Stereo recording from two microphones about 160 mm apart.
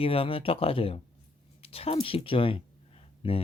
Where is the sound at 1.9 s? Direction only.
35° left (ahead or behind).